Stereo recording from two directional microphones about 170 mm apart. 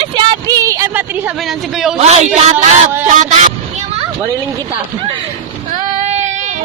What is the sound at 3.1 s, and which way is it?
Music, 45° right (ahead or behind).